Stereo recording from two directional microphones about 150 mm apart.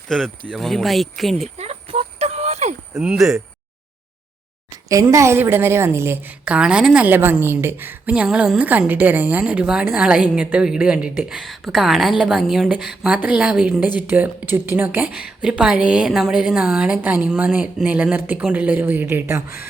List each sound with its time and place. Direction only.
0.1 s speech: 5° left (ahead or behind)
1.5 s clip-clop: 45° right (ahead or behind)
2.9 s speech: 5° right (ahead or behind)
4.9 s a woman's voice: 20° right (ahead or behind)